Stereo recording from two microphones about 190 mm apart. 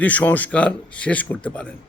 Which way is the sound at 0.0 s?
10° left (ahead or behind).